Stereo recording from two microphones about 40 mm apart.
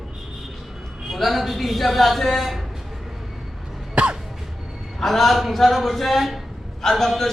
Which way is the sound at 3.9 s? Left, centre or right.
Right.